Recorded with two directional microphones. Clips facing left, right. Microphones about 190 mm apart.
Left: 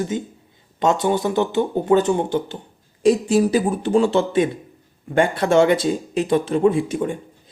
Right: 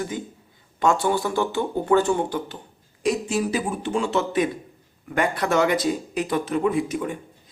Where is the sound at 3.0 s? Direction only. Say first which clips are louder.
Left 7 dB; 35° left (ahead or behind).